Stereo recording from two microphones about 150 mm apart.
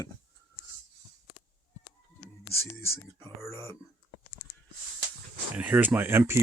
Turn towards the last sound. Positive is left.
turn(degrees=-15)  # may be behind; listen again after turning